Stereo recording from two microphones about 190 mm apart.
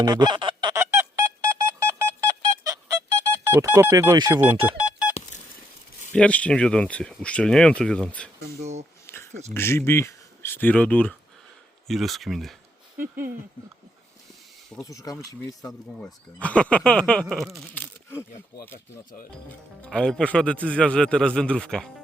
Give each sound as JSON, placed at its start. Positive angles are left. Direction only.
{"t": 0.0, "sound": "goose", "side_deg": -20}
{"t": 3.4, "sound": "speech", "side_deg": -15}
{"t": 4.8, "sound": "a sound", "side_deg": -5}
{"t": 6.1, "sound": "speech", "side_deg": 5}
{"t": 9.0, "sound": "a sound", "side_deg": 10}
{"t": 9.6, "sound": "speech", "side_deg": 10}
{"t": 14.8, "sound": "speech", "side_deg": 15}
{"t": 16.0, "sound": "speech", "side_deg": 5}
{"t": 19.5, "sound": "speech", "side_deg": 5}